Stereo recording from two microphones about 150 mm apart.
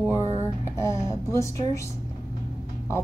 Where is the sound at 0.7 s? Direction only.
20° left (ahead or behind).